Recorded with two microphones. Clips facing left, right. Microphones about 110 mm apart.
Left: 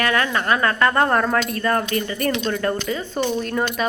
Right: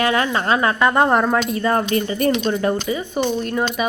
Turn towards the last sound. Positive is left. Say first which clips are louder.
# right 2 dB
turn(degrees=-5)  # may be behind; listen again after turning